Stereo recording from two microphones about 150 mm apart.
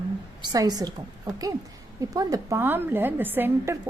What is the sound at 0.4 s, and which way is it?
Speech, 25° right (ahead or behind).